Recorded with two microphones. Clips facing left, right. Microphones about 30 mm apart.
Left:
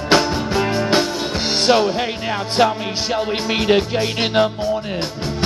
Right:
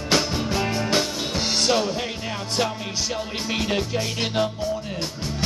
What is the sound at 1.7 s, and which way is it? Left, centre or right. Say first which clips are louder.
Speech: left 9 dB; left.